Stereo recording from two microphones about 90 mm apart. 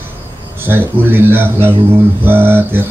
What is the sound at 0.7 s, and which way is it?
Speech, 25° right (ahead or behind).